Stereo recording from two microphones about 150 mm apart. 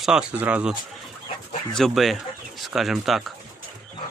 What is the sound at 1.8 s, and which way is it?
Speech, centre (ahead or behind).